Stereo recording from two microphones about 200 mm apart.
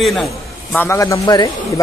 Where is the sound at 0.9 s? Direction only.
15° left (ahead or behind).